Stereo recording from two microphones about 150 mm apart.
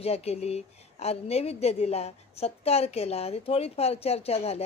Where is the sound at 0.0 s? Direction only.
45° left (ahead or behind).